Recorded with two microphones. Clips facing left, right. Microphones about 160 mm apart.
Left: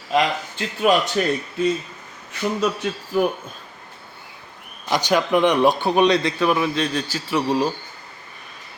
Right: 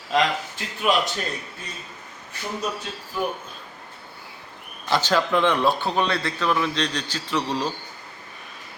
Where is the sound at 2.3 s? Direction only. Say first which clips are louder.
Left 7 dB; 90° left.